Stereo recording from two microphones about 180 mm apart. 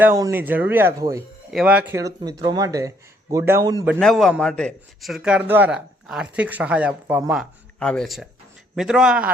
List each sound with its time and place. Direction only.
0.0 s speech: 15° right (ahead or behind)
1.5 s speech: 5° right (ahead or behind)
3.8 s a man's voice: centre (ahead or behind)
7.8 s a man's voice: 5° left (ahead or behind)